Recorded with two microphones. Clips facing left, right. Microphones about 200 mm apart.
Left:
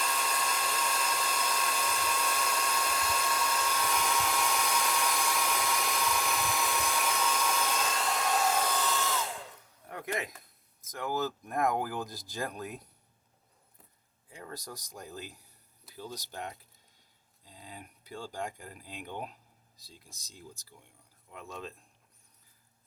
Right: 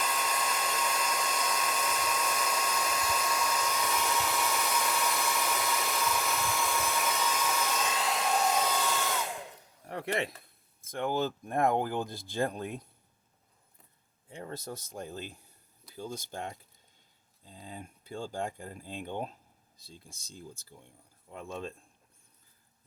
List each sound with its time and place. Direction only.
0.0 s hair dryer: 5° right (ahead or behind)
9.8 s a sound: 30° right (ahead or behind)
10.8 s speech: 30° right (ahead or behind)
14.3 s speech: 30° right (ahead or behind)
16.0 s speech: 50° right (ahead or behind)
16.3 s speech: 30° right (ahead or behind)
17.5 s a sound: 30° right (ahead or behind)
18.3 s speech: 30° right (ahead or behind)
20.7 s speech: 35° right (ahead or behind)